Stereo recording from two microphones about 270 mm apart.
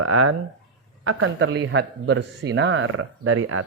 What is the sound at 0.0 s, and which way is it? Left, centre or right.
Speech, right.